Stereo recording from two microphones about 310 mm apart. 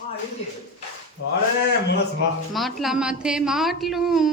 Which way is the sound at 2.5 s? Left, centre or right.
Centre.